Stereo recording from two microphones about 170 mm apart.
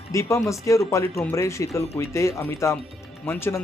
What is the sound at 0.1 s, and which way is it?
A man's voice, 15° left (ahead or behind).